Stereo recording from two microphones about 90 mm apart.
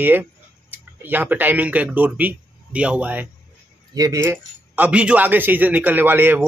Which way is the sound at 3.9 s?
40° right (ahead or behind).